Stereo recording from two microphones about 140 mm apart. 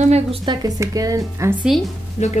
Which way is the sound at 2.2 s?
45° left (ahead or behind).